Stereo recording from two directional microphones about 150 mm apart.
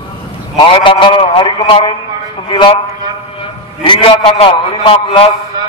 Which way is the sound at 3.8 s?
40° left (ahead or behind).